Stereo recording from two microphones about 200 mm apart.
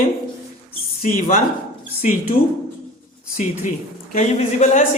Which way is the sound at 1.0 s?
45° left (ahead or behind).